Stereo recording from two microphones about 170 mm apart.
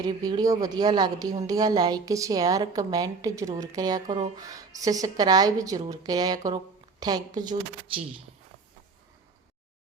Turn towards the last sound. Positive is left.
turn(degrees=-25)  # may be behind; listen again after turning